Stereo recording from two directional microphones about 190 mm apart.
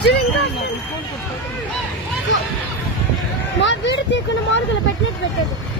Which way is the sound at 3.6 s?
70° left (ahead or behind).